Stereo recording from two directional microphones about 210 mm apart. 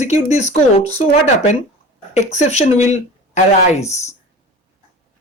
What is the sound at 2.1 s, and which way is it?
Speech, 35° left (ahead or behind).